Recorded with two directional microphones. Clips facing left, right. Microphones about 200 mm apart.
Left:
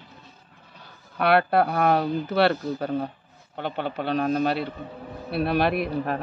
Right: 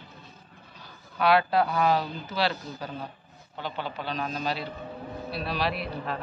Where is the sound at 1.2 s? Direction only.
60° left (ahead or behind).